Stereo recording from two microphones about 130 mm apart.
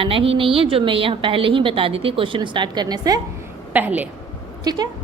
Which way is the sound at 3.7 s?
10° right (ahead or behind).